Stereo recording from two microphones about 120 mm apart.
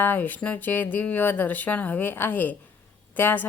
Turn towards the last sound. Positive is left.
turn(degrees=15)  # may be behind; listen again after turning